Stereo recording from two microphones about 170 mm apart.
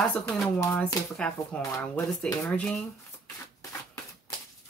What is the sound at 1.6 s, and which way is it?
Speech, 20° left (ahead or behind).